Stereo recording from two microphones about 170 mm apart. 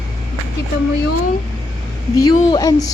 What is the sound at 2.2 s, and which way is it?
Speech, 25° left (ahead or behind).